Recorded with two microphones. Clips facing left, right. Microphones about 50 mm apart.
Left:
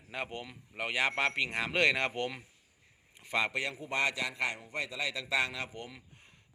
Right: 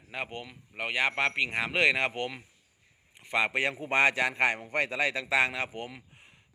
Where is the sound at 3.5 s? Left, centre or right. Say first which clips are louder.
Right 6 dB; right.